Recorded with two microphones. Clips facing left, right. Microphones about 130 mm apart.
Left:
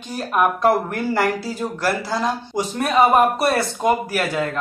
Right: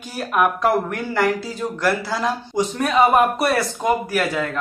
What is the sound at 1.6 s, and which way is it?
Speech, 20° left (ahead or behind).